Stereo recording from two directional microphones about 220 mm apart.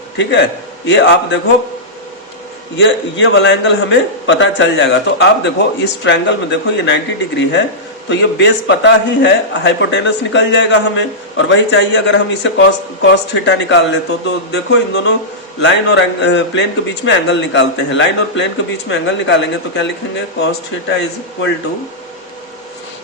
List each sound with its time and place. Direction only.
0.2 s a man's voice: 55° left (ahead or behind)
2.7 s a man's voice: 55° left (ahead or behind)